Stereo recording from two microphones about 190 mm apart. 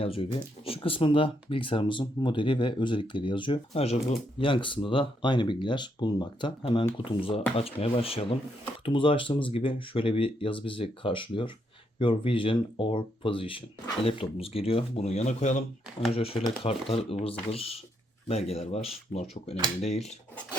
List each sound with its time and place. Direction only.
0.0 s speech: 30° left (ahead or behind)